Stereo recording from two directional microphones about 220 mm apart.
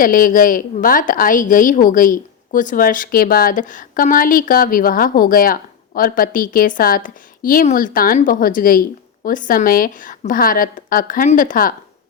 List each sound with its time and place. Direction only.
0.0 s a woman's voice: 40° left (ahead or behind)